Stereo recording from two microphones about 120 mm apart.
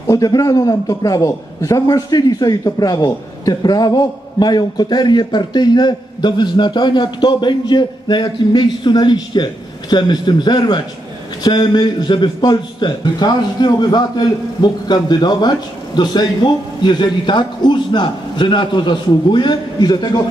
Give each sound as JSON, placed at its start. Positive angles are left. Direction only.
{"t": 0.0, "sound": "a man's voice", "side_deg": 30}